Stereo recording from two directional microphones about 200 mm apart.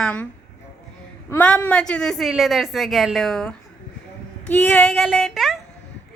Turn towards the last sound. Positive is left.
turn(degrees=0)  # may be behind; listen again after turning